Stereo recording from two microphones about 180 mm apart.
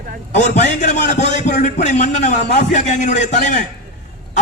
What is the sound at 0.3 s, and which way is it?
A man's voice, 40° left (ahead or behind).